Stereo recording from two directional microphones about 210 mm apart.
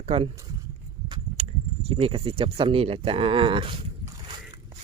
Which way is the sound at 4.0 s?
20° right (ahead or behind).